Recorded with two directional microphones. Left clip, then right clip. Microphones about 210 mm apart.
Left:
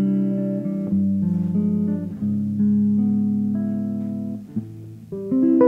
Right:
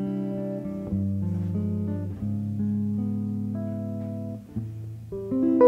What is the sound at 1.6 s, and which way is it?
Guitar, 40° right (ahead or behind).